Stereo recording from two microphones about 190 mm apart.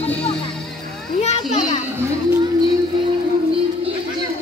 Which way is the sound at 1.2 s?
35° left (ahead or behind).